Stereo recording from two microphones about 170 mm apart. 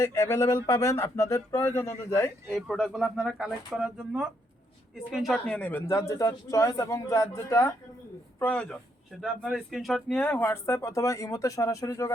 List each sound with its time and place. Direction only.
0.0 s speech: 15° left (ahead or behind)
2.5 s speech: centre (ahead or behind)
9.2 s speech: centre (ahead or behind); by 12.1 s 20° left (ahead or behind)